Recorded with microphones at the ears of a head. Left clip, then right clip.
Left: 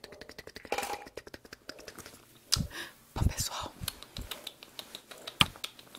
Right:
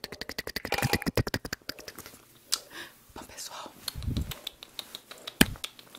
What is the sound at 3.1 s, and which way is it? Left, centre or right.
Whispering, left.